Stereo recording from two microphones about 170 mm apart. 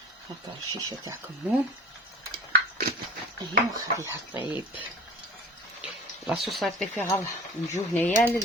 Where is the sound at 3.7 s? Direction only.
20° right (ahead or behind).